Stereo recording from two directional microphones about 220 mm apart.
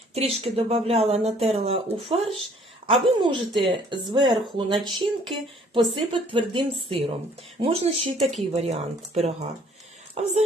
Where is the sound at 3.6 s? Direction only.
25° right (ahead or behind).